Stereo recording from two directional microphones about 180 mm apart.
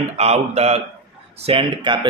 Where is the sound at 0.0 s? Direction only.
35° right (ahead or behind).